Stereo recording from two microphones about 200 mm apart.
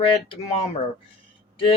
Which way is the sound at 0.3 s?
30° left (ahead or behind).